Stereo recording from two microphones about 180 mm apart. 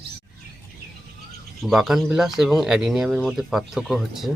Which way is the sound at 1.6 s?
Centre (ahead or behind).